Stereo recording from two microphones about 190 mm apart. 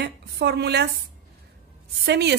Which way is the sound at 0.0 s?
60° right (ahead or behind).